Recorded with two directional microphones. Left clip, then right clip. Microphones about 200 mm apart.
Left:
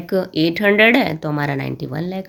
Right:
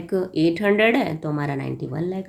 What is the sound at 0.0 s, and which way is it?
Speech, 30° left (ahead or behind).